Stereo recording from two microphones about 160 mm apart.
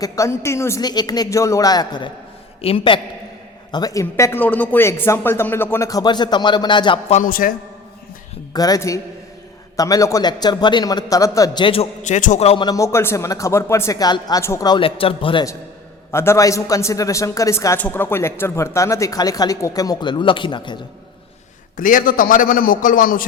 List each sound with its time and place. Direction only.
0.0 s a man's voice: 20° left (ahead or behind)
4.0 s speech: 15° left (ahead or behind); by 7.0 s 30° left (ahead or behind)
7.3 s a man's voice: 65° left (ahead or behind)
8.5 s speech: 25° left (ahead or behind)
12.0 s a man's voice: 50° left (ahead or behind)
12.6 s speech: 20° left (ahead or behind)
16.1 s speech: 15° left (ahead or behind)
21.8 s a man's voice: 60° left (ahead or behind)